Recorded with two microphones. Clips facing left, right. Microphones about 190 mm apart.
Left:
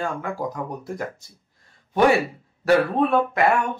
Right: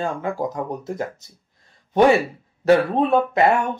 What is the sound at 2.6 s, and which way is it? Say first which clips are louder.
Speech: right 2 dB; 20° right (ahead or behind).